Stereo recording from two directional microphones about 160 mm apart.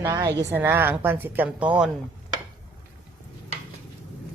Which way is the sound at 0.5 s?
15° right (ahead or behind).